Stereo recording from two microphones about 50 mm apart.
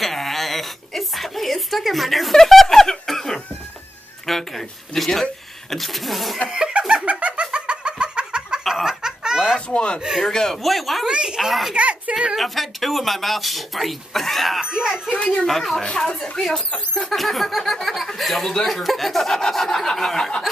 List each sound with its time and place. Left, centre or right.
0.0 s a sound: centre
4.3 s speech: centre
6.5 s laughter: right
6.8 s laughter: centre
7.1 s a sound: right
8.6 s a sound: centre
9.0 s laughter: centre
9.7 s speech: centre
9.9 s speech: centre
10.2 s speech: centre
11.1 s speech: centre
11.7 s a child's voice: right
12.4 s speech: centre
15.4 s speech: centre